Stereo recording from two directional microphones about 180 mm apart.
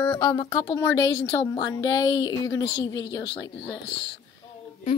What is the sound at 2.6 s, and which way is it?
Speech, 90° left.